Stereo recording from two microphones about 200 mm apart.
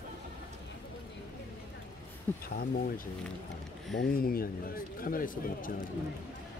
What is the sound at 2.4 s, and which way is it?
Speech, 50° left (ahead or behind).